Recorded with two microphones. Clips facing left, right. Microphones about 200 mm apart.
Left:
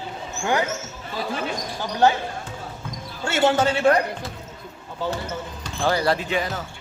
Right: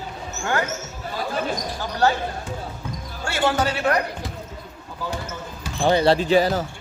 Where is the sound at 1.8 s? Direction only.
20° left (ahead or behind).